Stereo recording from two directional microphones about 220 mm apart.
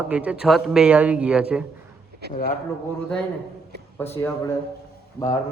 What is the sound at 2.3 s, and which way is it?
Speech, 40° left (ahead or behind).